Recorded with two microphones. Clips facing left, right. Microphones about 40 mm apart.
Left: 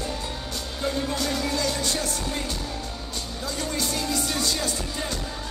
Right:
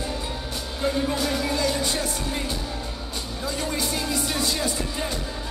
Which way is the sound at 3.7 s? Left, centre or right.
Centre.